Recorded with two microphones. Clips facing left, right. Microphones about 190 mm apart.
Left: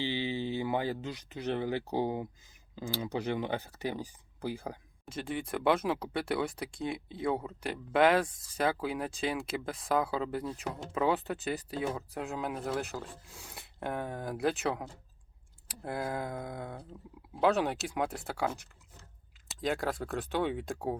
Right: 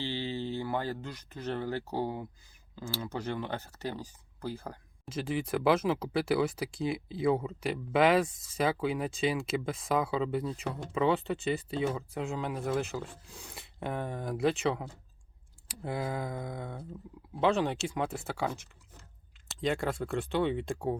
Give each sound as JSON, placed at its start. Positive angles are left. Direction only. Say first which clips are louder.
{"t": 0.0, "sound": "speech", "louder": "left 2 dB", "side_deg": 15}
{"t": 5.0, "sound": "speech", "louder": "right 3 dB", "side_deg": 0}